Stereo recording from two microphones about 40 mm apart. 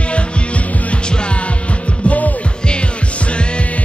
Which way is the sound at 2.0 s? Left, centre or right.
Left.